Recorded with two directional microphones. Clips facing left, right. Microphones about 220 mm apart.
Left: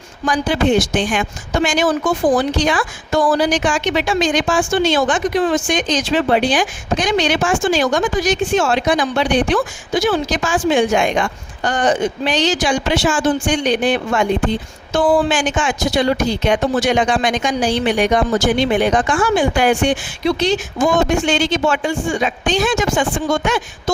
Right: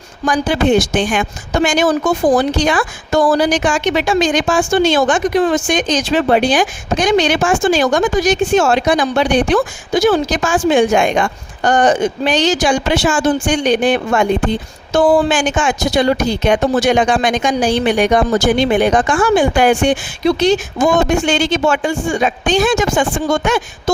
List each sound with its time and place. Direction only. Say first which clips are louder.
0.3 s a woman's voice: right 2 dB; 50° right (ahead or behind)